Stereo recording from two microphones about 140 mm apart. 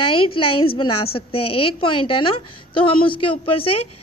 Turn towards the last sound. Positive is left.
turn(degrees=40)  # may be behind; listen again after turning